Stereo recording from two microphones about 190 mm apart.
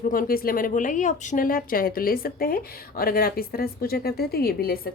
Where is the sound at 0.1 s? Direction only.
50° left (ahead or behind).